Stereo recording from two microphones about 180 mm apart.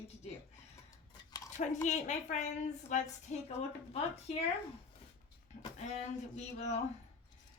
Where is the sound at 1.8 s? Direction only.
40° left (ahead or behind).